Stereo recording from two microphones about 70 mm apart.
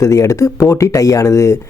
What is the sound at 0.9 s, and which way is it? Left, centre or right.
Speech, left.